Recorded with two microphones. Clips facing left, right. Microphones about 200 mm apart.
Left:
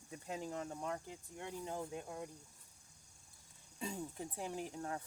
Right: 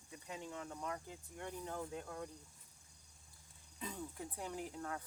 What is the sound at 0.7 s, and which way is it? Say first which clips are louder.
Speech: left 2 dB; 30° left (ahead or behind).